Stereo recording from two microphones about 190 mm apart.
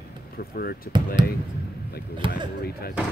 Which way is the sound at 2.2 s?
25° right (ahead or behind).